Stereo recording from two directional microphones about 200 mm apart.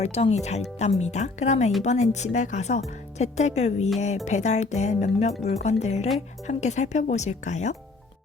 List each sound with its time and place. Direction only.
0.0 s speech: 30° left (ahead or behind)